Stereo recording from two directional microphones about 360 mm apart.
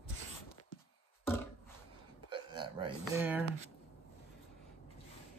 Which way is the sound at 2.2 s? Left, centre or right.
Centre.